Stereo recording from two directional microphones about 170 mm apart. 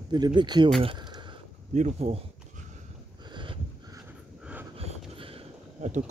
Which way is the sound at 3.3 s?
30° right (ahead or behind).